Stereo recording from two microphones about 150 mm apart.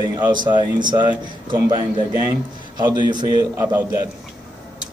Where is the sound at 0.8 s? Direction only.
30° right (ahead or behind).